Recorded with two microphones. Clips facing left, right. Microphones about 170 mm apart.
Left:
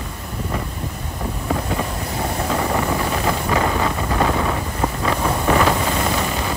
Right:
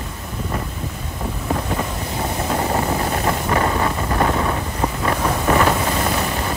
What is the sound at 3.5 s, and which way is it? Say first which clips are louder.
Wind noise: even; 35° right (ahead or behind).